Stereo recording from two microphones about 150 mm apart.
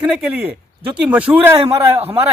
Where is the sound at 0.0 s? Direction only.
5° right (ahead or behind).